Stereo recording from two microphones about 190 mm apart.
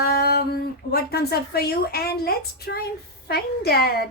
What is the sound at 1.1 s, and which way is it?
A woman's voice, 55° left (ahead or behind).